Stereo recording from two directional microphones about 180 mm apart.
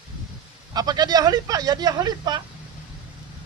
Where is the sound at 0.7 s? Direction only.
20° right (ahead or behind).